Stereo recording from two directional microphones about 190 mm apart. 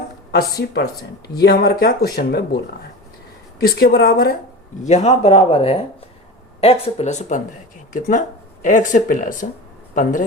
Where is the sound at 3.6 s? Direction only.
55° left (ahead or behind).